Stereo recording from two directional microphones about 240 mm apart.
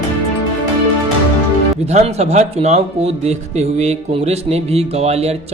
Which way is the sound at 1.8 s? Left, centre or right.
Right.